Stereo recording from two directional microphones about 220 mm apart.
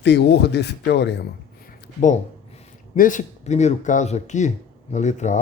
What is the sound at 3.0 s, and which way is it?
Speech, 35° left (ahead or behind).